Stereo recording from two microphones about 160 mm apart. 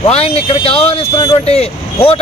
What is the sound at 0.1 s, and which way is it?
Speech, 40° left (ahead or behind).